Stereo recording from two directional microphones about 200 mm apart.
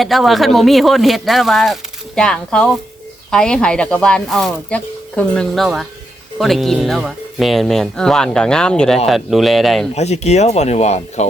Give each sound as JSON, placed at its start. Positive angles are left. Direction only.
{"t": 0.0, "sound": "speech", "side_deg": 0}
{"t": 9.9, "sound": "speech", "side_deg": 35}